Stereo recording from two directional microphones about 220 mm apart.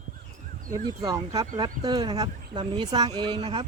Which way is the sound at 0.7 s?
15° right (ahead or behind).